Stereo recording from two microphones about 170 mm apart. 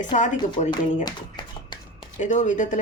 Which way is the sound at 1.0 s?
25° left (ahead or behind).